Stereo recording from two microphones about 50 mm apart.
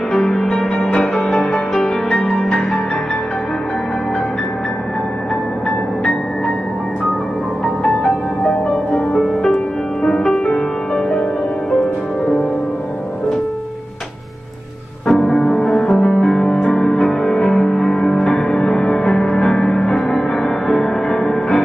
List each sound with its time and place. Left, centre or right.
0.1 s music: centre
8.0 s music: centre
9.2 s music: centre
15.0 s music: centre